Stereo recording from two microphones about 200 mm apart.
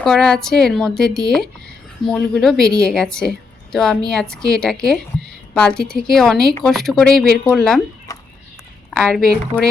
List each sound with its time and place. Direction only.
0.0 s a woman's voice: centre (ahead or behind)
8.1 s a sound: 15° left (ahead or behind)
8.9 s speech: 5° left (ahead or behind)